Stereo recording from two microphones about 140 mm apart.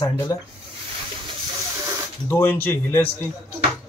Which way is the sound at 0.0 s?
30° left (ahead or behind).